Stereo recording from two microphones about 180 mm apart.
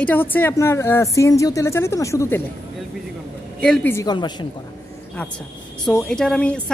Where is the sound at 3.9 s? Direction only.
20° left (ahead or behind).